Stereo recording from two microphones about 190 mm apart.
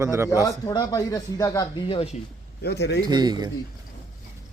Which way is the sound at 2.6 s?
60° left (ahead or behind).